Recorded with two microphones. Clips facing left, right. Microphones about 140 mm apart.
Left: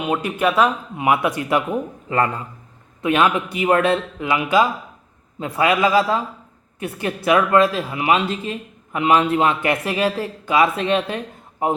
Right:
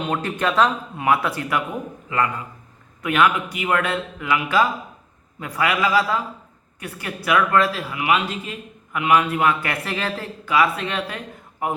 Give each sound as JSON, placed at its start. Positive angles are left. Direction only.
{"t": 0.0, "sound": "a man's voice", "side_deg": 10}
{"t": 2.0, "sound": "a man's voice", "side_deg": 35}